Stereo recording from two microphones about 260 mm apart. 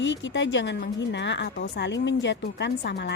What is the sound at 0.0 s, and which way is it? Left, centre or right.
A woman's voice, left.